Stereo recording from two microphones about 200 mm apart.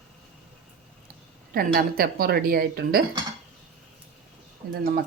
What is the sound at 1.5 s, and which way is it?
A woman's voice, 45° right (ahead or behind).